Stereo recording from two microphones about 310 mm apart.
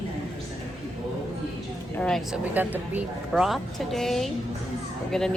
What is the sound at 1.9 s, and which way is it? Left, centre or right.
Speech, centre.